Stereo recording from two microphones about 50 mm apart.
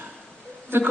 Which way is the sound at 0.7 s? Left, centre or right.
Right.